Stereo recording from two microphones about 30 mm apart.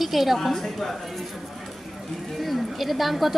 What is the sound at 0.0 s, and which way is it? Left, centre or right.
Speech, centre.